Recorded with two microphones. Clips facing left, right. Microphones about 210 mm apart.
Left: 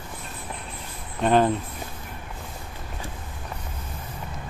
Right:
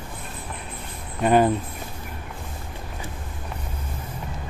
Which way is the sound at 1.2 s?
10° right (ahead or behind).